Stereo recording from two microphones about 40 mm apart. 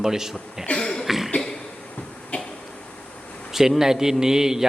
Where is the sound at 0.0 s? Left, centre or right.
Centre.